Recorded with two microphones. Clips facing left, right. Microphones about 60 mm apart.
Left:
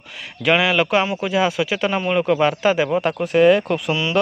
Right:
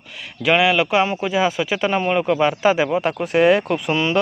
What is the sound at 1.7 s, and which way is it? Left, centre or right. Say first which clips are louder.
Speech: right 1 dB; centre.